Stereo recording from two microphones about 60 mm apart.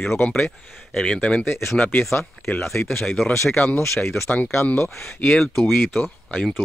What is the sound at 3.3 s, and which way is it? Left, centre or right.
Speech, left.